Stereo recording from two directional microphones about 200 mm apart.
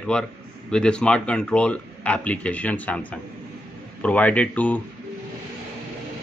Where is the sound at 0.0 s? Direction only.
5° left (ahead or behind).